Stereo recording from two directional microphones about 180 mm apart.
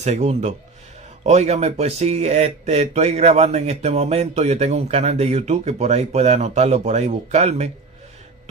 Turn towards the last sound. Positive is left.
turn(degrees=-35)  # may be behind; listen again after turning